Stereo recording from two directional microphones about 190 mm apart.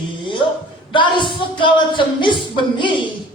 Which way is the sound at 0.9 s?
25° left (ahead or behind).